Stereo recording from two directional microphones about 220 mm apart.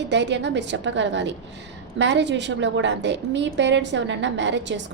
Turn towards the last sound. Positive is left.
turn(degrees=-55)  # may be behind; listen again after turning